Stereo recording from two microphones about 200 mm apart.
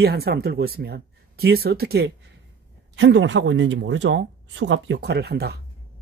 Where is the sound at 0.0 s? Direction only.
50° right (ahead or behind).